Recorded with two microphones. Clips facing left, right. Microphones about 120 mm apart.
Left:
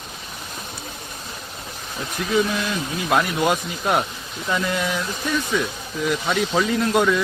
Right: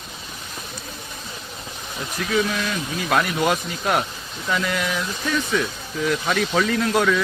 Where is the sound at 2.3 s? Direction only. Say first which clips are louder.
Left 1 dB; 15° left (ahead or behind).